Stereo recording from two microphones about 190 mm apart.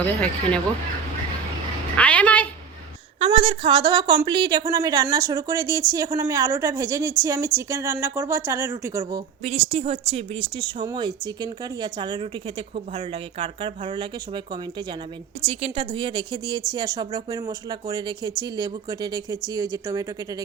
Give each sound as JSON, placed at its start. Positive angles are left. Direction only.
{"t": 0.0, "sound": "speech", "side_deg": 5}
{"t": 2.0, "sound": "a sound", "side_deg": 5}
{"t": 3.2, "sound": "a woman's voice", "side_deg": -30}
{"t": 9.4, "sound": "a woman's voice", "side_deg": -35}